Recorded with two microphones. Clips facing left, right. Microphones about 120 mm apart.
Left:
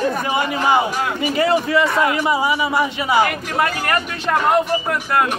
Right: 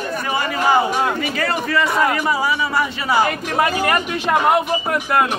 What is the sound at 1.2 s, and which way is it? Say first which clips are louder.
A man's voice: left 5 dB; 20° left (ahead or behind).